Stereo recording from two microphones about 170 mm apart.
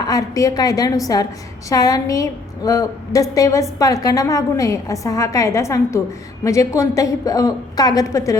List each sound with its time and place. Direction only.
0.1 s a woman's voice: 20° left (ahead or behind)